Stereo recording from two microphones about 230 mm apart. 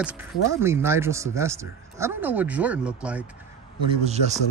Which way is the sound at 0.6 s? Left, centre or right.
Centre.